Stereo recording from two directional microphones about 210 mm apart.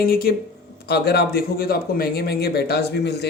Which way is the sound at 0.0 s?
45° left (ahead or behind).